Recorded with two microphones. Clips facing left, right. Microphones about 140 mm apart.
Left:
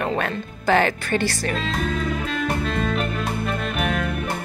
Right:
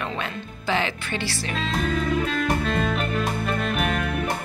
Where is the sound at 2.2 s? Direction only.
Centre (ahead or behind).